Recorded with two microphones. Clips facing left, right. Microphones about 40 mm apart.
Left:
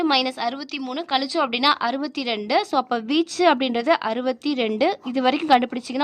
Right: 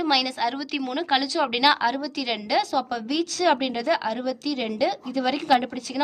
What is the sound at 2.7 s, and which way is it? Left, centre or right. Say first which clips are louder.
A woman's voice: left 4 dB; left.